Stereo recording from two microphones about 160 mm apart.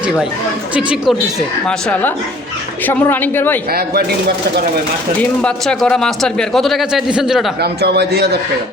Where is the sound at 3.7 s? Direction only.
75° right (ahead or behind).